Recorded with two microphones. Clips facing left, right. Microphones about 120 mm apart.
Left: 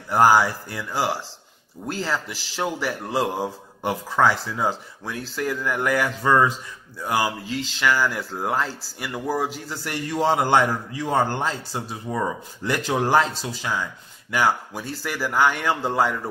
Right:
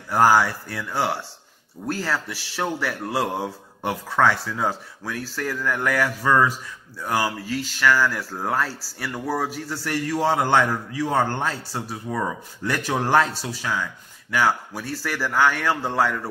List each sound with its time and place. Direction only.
0.1 s speech: 15° left (ahead or behind)
5.0 s speech: 20° left (ahead or behind)